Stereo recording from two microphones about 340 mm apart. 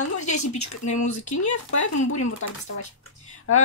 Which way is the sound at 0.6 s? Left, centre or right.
Left.